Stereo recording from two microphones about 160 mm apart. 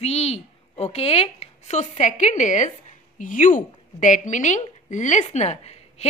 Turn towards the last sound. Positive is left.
turn(degrees=40)  # may be behind; listen again after turning